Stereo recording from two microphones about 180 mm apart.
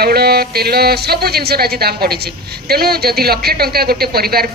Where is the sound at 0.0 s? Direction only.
60° right (ahead or behind).